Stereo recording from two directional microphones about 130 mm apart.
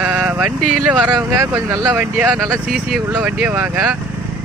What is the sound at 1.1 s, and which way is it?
Speech, 30° right (ahead or behind).